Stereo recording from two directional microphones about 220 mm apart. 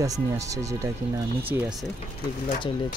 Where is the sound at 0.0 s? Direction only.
15° right (ahead or behind).